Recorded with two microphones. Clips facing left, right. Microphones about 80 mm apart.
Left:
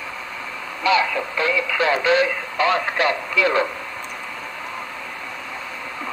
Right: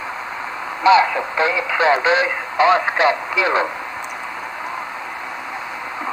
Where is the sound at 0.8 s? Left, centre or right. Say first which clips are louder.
Right 6 dB; right.